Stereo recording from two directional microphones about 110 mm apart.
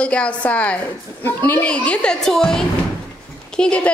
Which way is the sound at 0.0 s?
10° left (ahead or behind).